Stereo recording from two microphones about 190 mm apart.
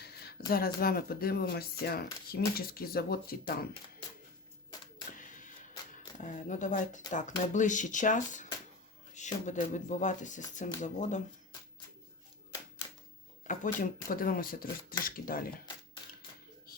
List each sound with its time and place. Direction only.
0.0 s speech: 55° left (ahead or behind)
5.1 s a sound: 45° left (ahead or behind)
6.1 s speech: 40° left (ahead or behind)
13.7 s speech: 50° left (ahead or behind)